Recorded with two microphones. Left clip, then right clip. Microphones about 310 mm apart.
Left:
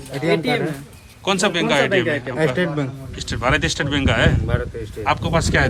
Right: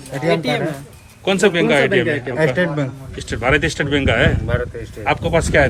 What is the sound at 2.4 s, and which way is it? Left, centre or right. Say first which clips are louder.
Speech: right 3 dB; centre.